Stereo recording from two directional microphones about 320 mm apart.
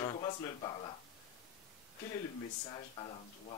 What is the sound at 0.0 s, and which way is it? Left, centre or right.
Speech, centre.